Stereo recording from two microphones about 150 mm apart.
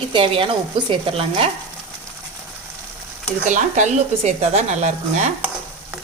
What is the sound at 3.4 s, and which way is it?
Speech, 55° right (ahead or behind).